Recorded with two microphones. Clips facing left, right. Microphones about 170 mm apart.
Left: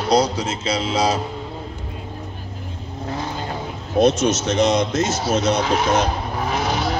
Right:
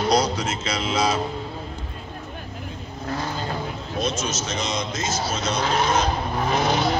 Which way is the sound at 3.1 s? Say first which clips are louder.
Left 1 dB; 20° left (ahead or behind).